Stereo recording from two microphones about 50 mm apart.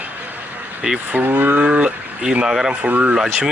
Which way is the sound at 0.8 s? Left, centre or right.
Centre.